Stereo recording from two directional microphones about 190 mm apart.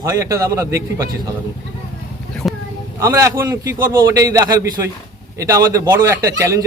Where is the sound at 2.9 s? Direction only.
15° right (ahead or behind).